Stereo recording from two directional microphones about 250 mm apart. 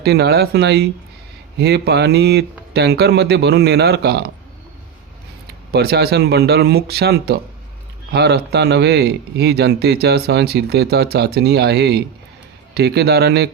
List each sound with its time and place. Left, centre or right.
0.0 s speech: right
5.7 s speech: right